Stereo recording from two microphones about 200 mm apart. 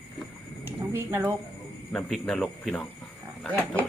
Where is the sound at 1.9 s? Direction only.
5° left (ahead or behind).